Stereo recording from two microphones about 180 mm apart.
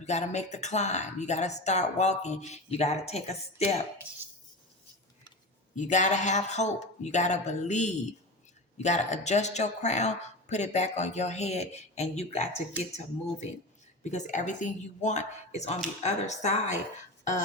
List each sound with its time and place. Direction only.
0.0 s speech: 40° left (ahead or behind)
5.7 s speech: 45° left (ahead or behind)
14.0 s speech: 40° left (ahead or behind)